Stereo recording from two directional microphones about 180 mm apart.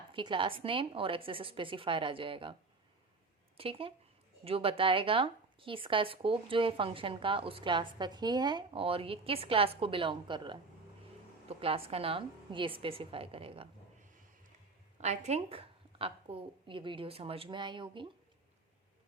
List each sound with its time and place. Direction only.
0.1 s speech: 25° right (ahead or behind)
3.6 s a woman's voice: 30° right (ahead or behind)
15.0 s a woman's voice: 40° right (ahead or behind)